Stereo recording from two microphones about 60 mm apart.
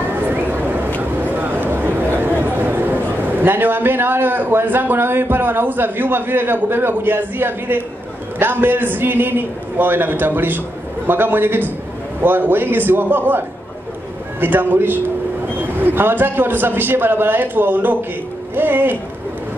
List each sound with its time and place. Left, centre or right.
0.1 s a sound: right
1.2 s a man's voice: right
14.4 s a man's voice: right